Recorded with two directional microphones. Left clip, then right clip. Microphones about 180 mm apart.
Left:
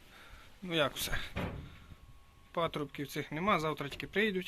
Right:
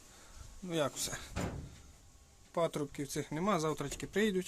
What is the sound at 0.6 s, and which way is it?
Speech, 15° right (ahead or behind).